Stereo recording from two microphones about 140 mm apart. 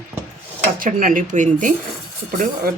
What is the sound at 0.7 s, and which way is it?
Speech, 70° right (ahead or behind).